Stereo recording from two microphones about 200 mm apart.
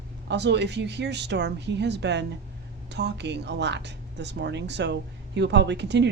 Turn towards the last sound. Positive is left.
turn(degrees=-60)  # may be behind; listen again after turning